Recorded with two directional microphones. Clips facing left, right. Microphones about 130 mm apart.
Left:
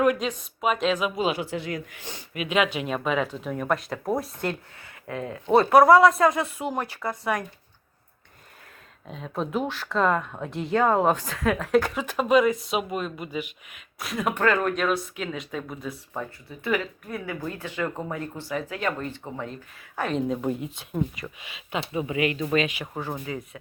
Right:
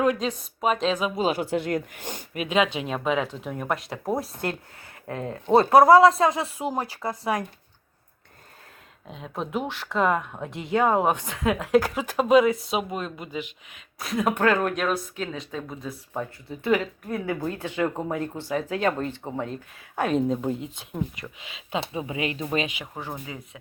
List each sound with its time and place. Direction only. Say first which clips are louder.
0.0 s speech: left 1 dB; 30° right (ahead or behind)
3.0 s speech: right 3 dB; 5° right (ahead or behind)
5.0 s speech: right 1 dB; 35° right (ahead or behind)
9.0 s a woman's voice: left 2 dB; 15° right (ahead or behind)
12.1 s speech: right 2 dB; 25° right (ahead or behind)
12.6 s speech: even; centre (ahead or behind)
13.2 s speech: left 1 dB; 25° right (ahead or behind)
14.2 s speech: right 1 dB; 5° right (ahead or behind)
15.3 s speech: left 1 dB; 30° right (ahead or behind)
20.0 s a woman's voice: right 3 dB; 10° right (ahead or behind)
20.3 s speech: even; 15° left (ahead or behind)
21.7 s a woman's voice: left 1 dB; 25° right (ahead or behind)